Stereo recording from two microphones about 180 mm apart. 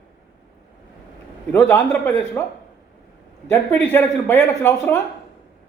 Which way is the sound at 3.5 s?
10° left (ahead or behind).